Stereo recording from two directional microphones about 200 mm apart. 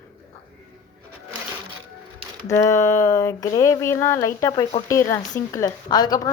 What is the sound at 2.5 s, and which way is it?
A woman's voice, 15° left (ahead or behind).